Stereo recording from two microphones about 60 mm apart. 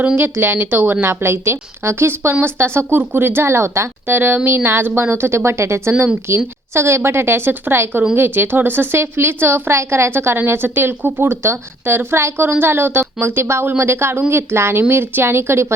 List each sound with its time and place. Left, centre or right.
0.2 s a woman's voice: right